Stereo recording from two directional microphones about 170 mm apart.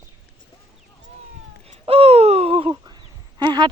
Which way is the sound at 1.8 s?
35° right (ahead or behind).